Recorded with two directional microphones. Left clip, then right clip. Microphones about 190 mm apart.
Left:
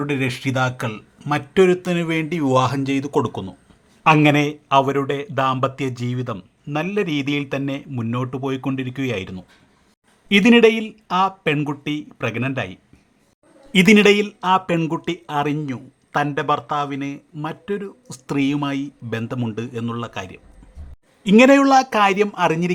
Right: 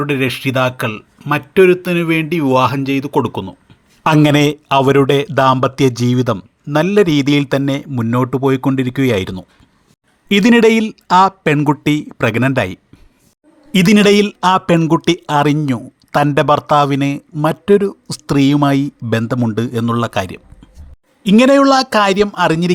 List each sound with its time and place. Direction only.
0.0 s speech: 15° right (ahead or behind)
4.0 s a man's voice: 30° right (ahead or behind)
13.7 s a man's voice: 25° right (ahead or behind)
21.2 s a man's voice: 20° right (ahead or behind)